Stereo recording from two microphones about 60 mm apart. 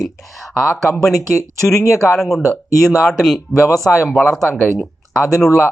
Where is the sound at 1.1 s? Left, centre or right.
Left.